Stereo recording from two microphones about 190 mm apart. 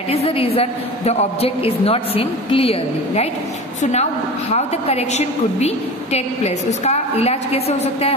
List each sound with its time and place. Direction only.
0.1 s a woman's voice: 30° left (ahead or behind)